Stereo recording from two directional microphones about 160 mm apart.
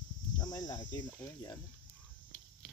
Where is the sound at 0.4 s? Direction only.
25° left (ahead or behind).